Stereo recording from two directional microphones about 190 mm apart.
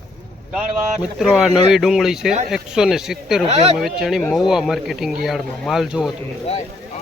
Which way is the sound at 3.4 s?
35° right (ahead or behind).